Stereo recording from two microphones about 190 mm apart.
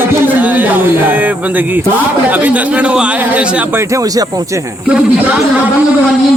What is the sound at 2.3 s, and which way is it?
Speech, 10° right (ahead or behind).